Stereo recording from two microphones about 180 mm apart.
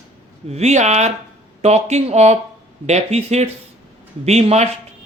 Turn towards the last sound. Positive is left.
turn(degrees=-35)  # may be behind; listen again after turning